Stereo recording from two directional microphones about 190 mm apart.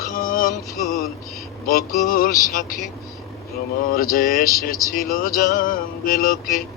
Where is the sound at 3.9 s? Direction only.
50° left (ahead or behind).